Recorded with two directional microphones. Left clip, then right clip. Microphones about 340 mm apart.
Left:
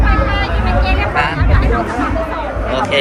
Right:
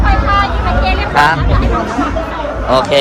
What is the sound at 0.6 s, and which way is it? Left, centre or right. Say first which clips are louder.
Vehicle: right 2 dB; right.